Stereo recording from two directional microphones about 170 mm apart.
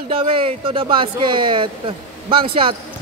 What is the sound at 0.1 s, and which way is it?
Speech, 35° right (ahead or behind).